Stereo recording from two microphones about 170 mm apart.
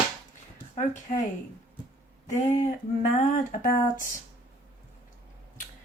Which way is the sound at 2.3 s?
50° left (ahead or behind).